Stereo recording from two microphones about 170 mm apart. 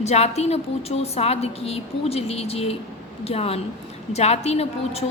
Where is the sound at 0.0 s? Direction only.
40° left (ahead or behind).